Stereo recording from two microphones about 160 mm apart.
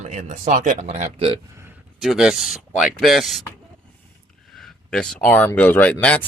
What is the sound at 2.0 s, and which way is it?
Speech, centre (ahead or behind).